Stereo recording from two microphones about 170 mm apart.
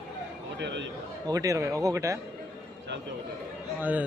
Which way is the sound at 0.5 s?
90° right.